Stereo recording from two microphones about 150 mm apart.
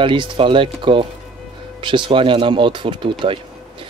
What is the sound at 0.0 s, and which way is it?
Speech, 35° right (ahead or behind).